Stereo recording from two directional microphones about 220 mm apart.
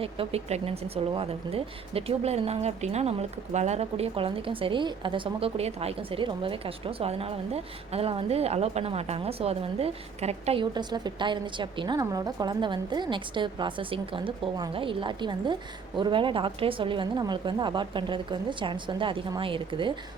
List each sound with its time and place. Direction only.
0.0 s speech: 25° right (ahead or behind)